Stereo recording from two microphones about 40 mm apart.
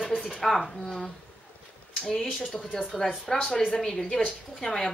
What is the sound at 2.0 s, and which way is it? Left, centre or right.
Speech, centre.